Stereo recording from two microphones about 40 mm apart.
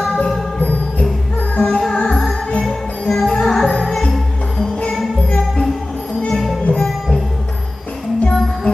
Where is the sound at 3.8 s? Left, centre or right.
Centre.